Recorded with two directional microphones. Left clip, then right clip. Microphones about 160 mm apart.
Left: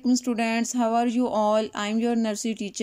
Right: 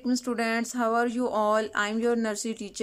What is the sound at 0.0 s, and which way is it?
Speech, 15° left (ahead or behind).